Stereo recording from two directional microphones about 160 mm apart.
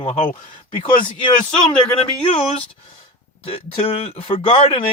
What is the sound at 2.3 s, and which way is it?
Speech, 35° left (ahead or behind).